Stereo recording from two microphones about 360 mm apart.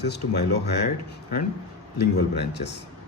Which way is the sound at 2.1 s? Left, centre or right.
Left.